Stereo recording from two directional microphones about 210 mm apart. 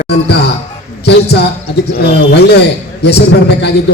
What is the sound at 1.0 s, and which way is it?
A man's voice, 55° left (ahead or behind).